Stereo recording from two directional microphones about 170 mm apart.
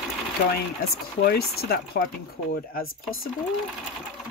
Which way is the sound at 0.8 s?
65° left (ahead or behind).